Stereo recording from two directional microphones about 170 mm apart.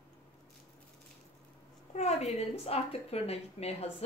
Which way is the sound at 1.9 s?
40° left (ahead or behind).